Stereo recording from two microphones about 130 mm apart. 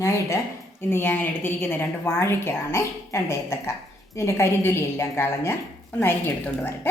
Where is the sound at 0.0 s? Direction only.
25° left (ahead or behind).